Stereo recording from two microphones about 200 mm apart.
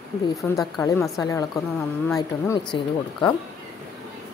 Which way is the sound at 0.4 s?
15° left (ahead or behind).